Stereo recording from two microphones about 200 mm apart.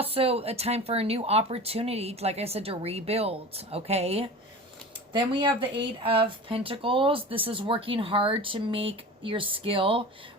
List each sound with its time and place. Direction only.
0.0 s speech: 30° right (ahead or behind)